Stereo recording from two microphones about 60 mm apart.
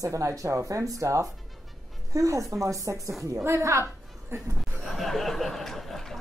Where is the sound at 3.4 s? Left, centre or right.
Right.